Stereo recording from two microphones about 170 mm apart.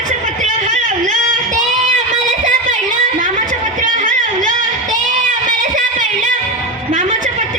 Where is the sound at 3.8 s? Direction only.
50° right (ahead or behind).